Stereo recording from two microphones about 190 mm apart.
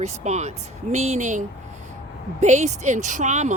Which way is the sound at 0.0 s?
35° right (ahead or behind).